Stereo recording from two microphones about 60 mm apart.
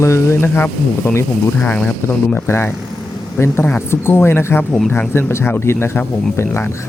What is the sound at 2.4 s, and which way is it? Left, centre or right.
Speech, left.